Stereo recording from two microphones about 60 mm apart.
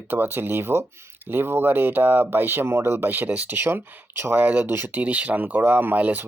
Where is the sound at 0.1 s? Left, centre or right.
Right.